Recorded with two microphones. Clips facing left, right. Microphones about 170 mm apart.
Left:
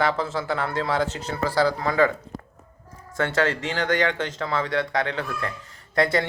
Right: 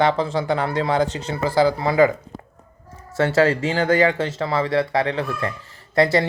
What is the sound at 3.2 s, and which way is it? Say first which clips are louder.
Speech: right 6 dB; 5° right (ahead or behind).